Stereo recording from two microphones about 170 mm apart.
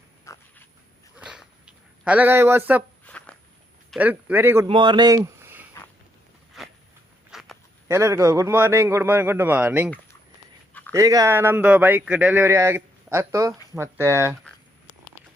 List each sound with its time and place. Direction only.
0.3 s dog: 15° left (ahead or behind)
1.2 s a sound: 5° right (ahead or behind)
3.0 s a sound: 10° left (ahead or behind)
3.9 s speech: 10° right (ahead or behind)
4.6 s speech: 25° right (ahead or behind)
6.5 s a sound: centre (ahead or behind)
7.3 s walk: centre (ahead or behind)
7.9 s speech: 15° right (ahead or behind)
10.9 s speech: 20° right (ahead or behind)